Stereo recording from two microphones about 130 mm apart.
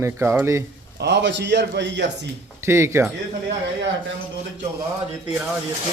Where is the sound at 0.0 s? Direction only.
20° right (ahead or behind).